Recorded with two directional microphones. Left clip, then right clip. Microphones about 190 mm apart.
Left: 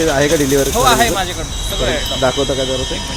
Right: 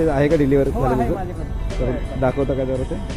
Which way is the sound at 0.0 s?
5° right (ahead or behind).